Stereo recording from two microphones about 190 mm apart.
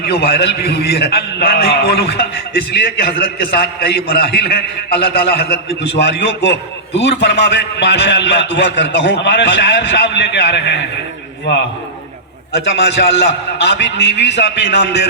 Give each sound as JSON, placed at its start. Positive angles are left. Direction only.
{"t": 0.0, "sound": "a man's voice", "side_deg": 60}
{"t": 3.4, "sound": "a man's voice", "side_deg": 55}
{"t": 12.5, "sound": "a man's voice", "side_deg": 65}